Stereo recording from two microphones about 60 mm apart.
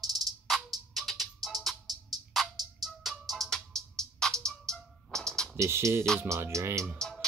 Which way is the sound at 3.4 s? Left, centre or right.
Centre.